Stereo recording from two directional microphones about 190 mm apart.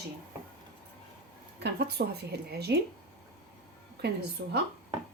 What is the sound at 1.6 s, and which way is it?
Speech, 60° right (ahead or behind).